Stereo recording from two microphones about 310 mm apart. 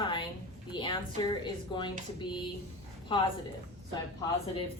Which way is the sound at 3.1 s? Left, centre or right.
Centre.